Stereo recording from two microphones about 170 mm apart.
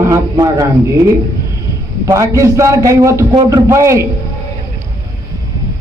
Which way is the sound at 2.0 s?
20° right (ahead or behind).